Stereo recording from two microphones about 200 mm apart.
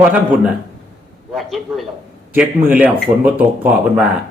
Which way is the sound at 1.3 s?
Centre (ahead or behind).